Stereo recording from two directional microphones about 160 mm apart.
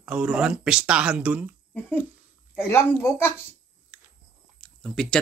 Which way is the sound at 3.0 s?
15° left (ahead or behind).